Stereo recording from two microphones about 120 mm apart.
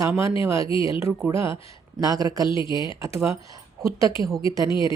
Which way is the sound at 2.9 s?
25° right (ahead or behind).